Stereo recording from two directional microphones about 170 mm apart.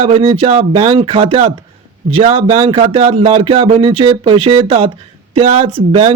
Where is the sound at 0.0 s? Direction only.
30° right (ahead or behind).